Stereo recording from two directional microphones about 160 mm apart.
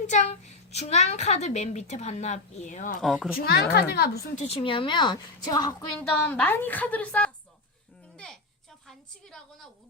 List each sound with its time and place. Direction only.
0.7 s a woman's voice: 45° left (ahead or behind)
3.0 s a woman's voice: centre (ahead or behind)
3.3 s a woman's voice: 70° left (ahead or behind); by 4.2 s 90° left
4.4 s a woman's voice: 40° left (ahead or behind)
6.0 s a woman's voice: 10° left (ahead or behind)
8.1 s a sound: 5° left (ahead or behind)